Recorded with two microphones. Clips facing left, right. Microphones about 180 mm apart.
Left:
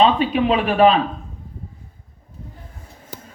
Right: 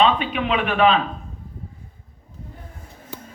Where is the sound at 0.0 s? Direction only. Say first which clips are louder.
Left 3 dB; 35° left (ahead or behind).